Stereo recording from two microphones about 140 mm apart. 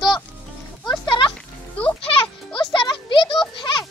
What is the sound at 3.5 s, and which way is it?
Music, 35° left (ahead or behind).